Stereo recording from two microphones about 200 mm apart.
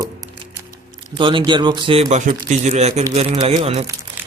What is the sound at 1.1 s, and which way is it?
Speech, 25° right (ahead or behind).